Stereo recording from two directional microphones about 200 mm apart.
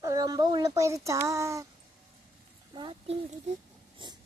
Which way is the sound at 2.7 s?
20° right (ahead or behind).